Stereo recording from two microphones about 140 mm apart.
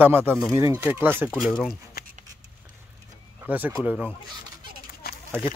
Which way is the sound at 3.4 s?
10° right (ahead or behind).